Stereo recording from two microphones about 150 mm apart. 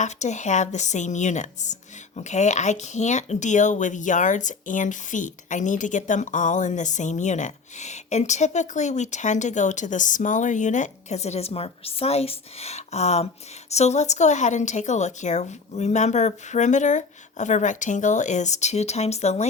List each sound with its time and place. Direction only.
0.0 s a woman's voice: 55° left (ahead or behind)